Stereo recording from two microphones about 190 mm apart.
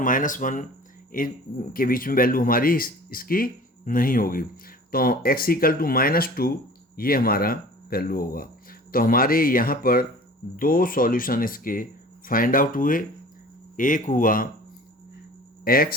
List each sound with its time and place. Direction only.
0.0 s speech: 45° left (ahead or behind)
15.6 s speech: 50° left (ahead or behind)